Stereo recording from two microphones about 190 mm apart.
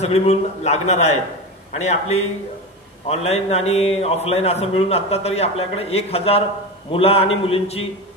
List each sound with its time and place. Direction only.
0.0 s a man's voice: 35° left (ahead or behind)